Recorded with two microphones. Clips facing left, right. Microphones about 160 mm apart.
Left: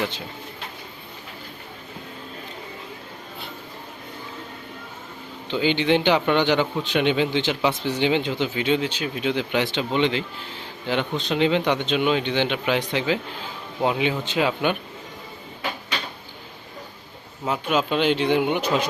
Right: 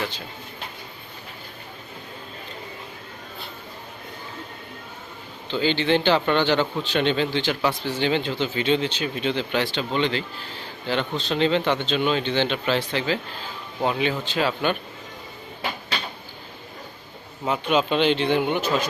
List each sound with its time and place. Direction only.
5.5 s a man's voice: 15° left (ahead or behind)
17.4 s a man's voice: 5° left (ahead or behind)